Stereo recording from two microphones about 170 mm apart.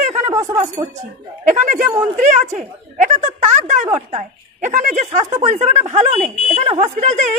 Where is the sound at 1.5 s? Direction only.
50° right (ahead or behind).